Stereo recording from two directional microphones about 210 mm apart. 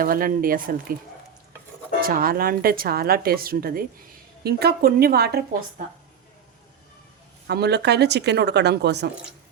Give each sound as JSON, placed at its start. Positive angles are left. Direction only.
{"t": 0.0, "sound": "speech", "side_deg": -45}
{"t": 2.0, "sound": "speech", "side_deg": -45}
{"t": 7.4, "sound": "speech", "side_deg": -50}